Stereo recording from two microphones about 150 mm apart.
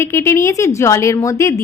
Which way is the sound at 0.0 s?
15° left (ahead or behind).